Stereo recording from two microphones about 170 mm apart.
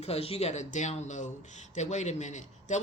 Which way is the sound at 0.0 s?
35° left (ahead or behind).